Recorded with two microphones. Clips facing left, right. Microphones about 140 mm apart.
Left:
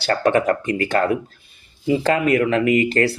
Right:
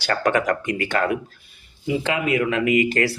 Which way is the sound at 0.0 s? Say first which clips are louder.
Left 3 dB; 30° left (ahead or behind).